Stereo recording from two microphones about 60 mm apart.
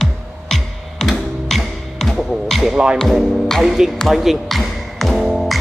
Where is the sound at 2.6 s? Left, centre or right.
Centre.